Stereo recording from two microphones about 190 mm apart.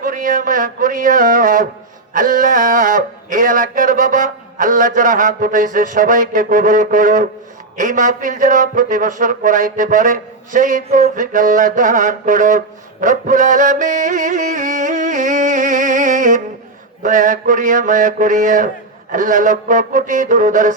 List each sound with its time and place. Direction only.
0.0 s a man's voice: 45° right (ahead or behind)